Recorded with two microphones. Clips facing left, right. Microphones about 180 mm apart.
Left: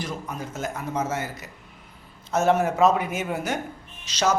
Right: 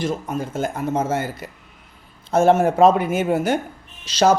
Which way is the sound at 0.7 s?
50° right (ahead or behind).